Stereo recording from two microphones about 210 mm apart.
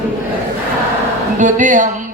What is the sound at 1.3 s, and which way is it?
Speech, 35° right (ahead or behind).